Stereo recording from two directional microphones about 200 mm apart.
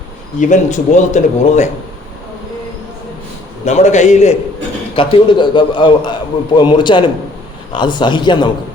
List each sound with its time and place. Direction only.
0.3 s speech: 40° left (ahead or behind)
3.7 s speech: 35° left (ahead or behind)
4.9 s a man's voice: 25° left (ahead or behind)